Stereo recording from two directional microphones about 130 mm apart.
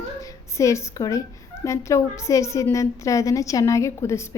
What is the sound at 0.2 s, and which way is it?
A woman's voice, 25° left (ahead or behind).